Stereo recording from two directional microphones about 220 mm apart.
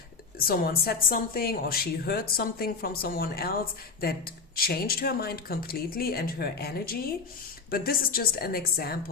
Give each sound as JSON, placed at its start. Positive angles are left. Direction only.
{"t": 0.3, "sound": "a woman's voice", "side_deg": 40}
{"t": 4.5, "sound": "a woman's voice", "side_deg": 40}